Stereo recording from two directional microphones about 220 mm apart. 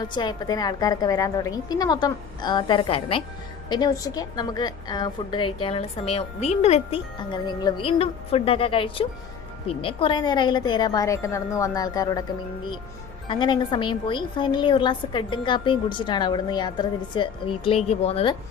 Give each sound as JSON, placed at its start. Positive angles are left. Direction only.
{"t": 0.0, "sound": "a woman's voice", "side_deg": 20}
{"t": 13.2, "sound": "a woman's voice", "side_deg": 20}